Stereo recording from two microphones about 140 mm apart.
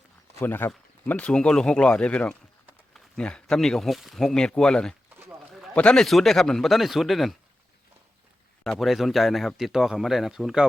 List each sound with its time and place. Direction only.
0.3 s speech: 15° left (ahead or behind)
8.6 s speech: centre (ahead or behind)